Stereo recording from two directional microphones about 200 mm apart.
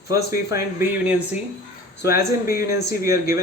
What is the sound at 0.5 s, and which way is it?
Speech, 10° right (ahead or behind).